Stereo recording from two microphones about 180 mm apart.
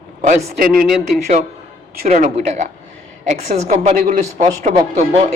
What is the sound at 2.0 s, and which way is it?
A woman's voice, 40° right (ahead or behind).